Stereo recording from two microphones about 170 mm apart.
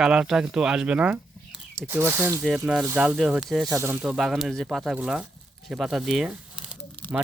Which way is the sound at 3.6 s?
15° right (ahead or behind).